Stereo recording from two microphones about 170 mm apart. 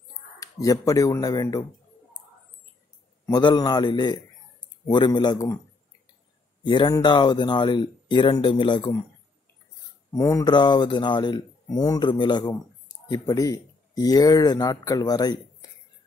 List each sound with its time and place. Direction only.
0.4 s speech: 20° left (ahead or behind)
3.3 s speech: 25° left (ahead or behind)
6.6 s speech: 25° left (ahead or behind)
10.1 s speech: 20° left (ahead or behind)